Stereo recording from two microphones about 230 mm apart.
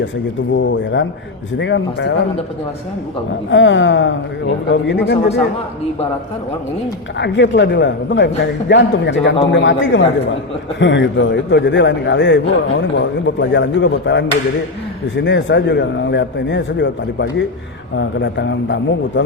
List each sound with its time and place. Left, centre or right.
0.7 s a man's voice: left
3.5 s a man's voice: left
7.2 s a man's voice: left